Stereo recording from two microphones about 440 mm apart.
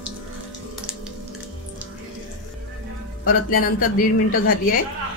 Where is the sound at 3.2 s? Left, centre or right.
Centre.